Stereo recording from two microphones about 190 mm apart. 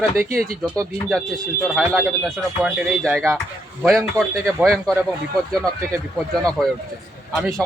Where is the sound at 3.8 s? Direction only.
15° right (ahead or behind).